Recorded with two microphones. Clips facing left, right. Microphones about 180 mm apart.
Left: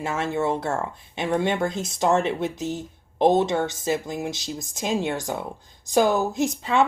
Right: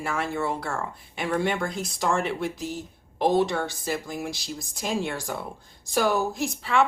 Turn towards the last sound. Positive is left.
turn(degrees=20)  # may be behind; listen again after turning